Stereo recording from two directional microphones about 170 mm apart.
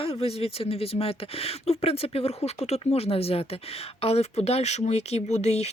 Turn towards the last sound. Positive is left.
turn(degrees=40)  # may be behind; listen again after turning